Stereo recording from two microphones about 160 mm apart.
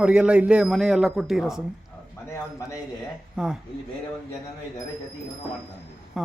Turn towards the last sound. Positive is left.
turn(degrees=-5)  # may be behind; listen again after turning